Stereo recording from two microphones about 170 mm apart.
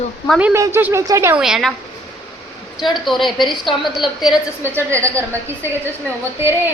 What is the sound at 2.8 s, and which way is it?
A man's voice, centre (ahead or behind).